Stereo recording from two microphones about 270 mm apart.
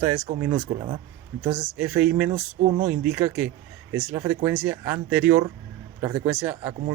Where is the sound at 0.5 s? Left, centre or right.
Right.